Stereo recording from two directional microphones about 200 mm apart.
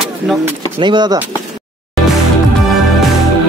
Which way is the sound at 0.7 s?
25° right (ahead or behind).